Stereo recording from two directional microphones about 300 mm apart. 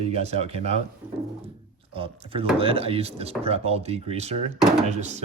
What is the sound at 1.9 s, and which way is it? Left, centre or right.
Speech, centre.